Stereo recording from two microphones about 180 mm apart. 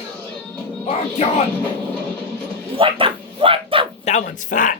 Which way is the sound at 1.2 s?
35° left (ahead or behind).